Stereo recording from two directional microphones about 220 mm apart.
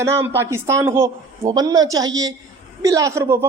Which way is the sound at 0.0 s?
10° right (ahead or behind).